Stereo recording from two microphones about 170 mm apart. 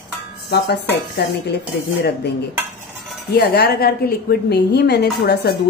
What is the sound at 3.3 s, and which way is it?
A woman's voice, 70° left (ahead or behind).